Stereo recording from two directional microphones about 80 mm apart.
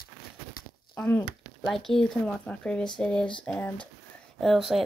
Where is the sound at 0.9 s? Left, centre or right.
Centre.